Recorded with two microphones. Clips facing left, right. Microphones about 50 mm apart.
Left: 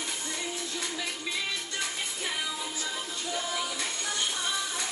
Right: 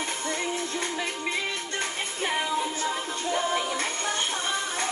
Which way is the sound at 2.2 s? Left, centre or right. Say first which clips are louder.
Right 9 dB; right.